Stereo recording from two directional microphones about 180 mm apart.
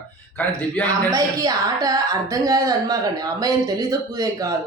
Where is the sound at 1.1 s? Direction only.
20° right (ahead or behind).